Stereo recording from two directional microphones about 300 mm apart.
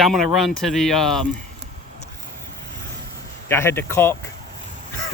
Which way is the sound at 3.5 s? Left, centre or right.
Centre.